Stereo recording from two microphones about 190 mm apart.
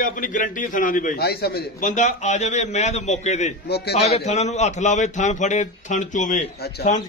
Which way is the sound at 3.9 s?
35° left (ahead or behind).